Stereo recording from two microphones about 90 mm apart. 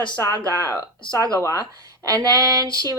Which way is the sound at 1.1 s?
40° right (ahead or behind).